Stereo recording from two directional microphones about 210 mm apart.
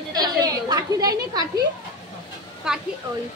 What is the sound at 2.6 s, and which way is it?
Speech, 5° right (ahead or behind).